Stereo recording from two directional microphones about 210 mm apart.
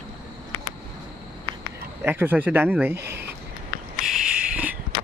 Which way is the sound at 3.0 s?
50° right (ahead or behind).